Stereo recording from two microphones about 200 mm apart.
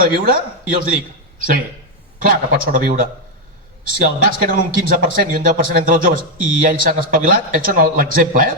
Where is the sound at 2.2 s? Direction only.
45° right (ahead or behind).